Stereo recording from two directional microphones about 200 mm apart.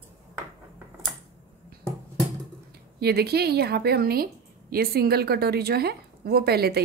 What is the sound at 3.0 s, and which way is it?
A woman's voice, 50° right (ahead or behind).